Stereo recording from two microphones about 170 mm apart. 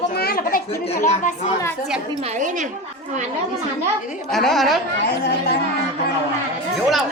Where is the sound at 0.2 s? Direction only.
60° left (ahead or behind).